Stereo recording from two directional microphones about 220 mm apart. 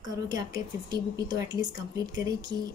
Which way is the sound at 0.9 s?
15° right (ahead or behind).